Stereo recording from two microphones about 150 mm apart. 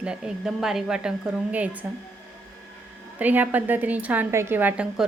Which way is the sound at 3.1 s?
10° right (ahead or behind).